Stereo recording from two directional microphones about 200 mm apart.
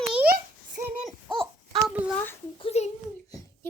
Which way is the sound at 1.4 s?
25° right (ahead or behind).